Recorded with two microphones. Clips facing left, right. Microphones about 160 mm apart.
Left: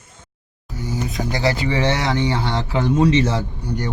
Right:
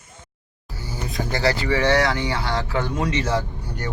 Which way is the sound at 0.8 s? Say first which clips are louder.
Left 4 dB; 20° left (ahead or behind).